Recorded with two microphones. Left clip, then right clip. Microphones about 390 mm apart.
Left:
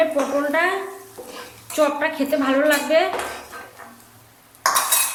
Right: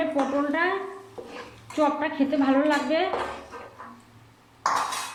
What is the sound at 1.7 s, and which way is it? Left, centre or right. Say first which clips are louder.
A woman's voice: left 5 dB; left.